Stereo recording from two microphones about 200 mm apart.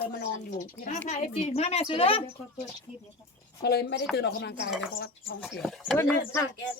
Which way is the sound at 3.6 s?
55° left (ahead or behind).